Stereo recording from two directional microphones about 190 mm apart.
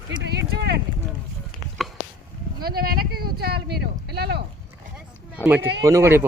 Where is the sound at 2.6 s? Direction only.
50° right (ahead or behind).